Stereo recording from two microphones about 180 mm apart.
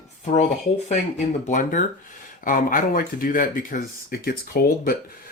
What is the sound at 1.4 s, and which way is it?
Speech, 45° left (ahead or behind).